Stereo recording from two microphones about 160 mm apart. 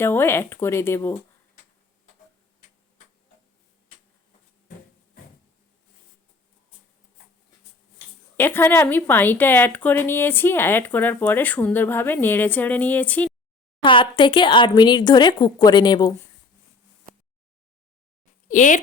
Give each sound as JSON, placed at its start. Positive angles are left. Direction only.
{"t": 0.0, "sound": "a woman's voice", "side_deg": 15}
{"t": 8.4, "sound": "a woman's voice", "side_deg": 15}
{"t": 13.8, "sound": "speech", "side_deg": 30}
{"t": 18.4, "sound": "speech", "side_deg": 55}